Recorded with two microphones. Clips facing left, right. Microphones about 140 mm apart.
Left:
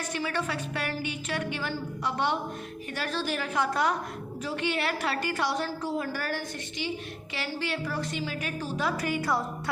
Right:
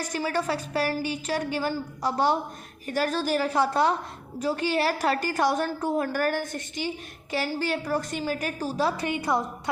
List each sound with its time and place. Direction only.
0.1 s a woman's voice: 40° right (ahead or behind); by 9.4 s 20° right (ahead or behind)